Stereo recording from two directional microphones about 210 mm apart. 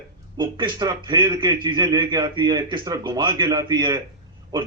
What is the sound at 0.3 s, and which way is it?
A man's voice, 20° right (ahead or behind).